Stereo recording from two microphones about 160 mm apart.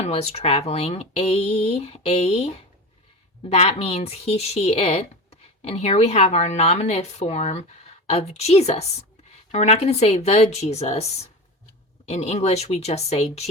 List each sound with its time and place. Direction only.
0.0 s speech: 40° left (ahead or behind)
3.5 s speech: 40° left (ahead or behind)